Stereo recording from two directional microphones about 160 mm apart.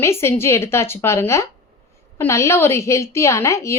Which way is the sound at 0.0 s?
15° left (ahead or behind).